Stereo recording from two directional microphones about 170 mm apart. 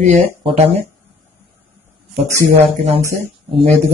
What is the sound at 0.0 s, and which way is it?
Speech, 40° right (ahead or behind).